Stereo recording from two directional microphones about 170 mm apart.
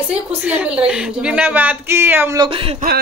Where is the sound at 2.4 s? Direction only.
30° right (ahead or behind).